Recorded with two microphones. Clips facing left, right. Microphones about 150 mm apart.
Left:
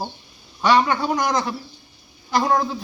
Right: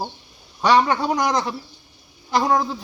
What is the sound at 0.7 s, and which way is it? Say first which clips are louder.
Speech: right 1 dB; 35° right (ahead or behind).